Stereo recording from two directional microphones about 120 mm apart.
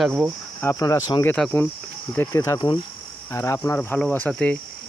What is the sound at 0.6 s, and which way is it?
Speech, 25° left (ahead or behind).